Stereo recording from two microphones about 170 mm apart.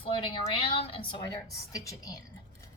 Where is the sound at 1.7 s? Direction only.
20° left (ahead or behind).